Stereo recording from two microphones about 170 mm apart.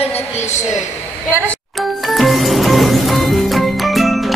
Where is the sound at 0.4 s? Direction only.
45° left (ahead or behind).